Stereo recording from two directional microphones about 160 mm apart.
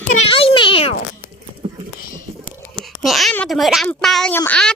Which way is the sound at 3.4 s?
Centre (ahead or behind).